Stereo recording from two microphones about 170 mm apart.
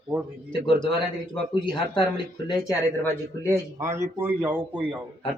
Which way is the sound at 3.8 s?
15° right (ahead or behind).